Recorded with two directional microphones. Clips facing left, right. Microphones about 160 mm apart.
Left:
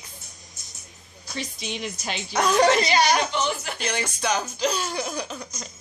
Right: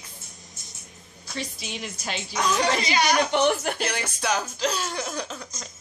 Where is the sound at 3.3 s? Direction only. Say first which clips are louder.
Right 5 dB; 60° right (ahead or behind).